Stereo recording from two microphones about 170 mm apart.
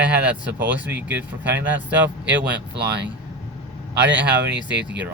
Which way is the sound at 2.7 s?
80° right.